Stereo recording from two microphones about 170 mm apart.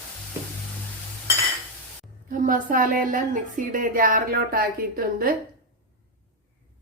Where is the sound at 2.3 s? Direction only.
55° right (ahead or behind).